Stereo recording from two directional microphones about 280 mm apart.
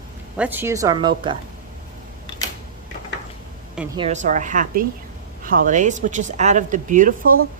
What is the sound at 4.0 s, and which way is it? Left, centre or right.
A woman's voice, right.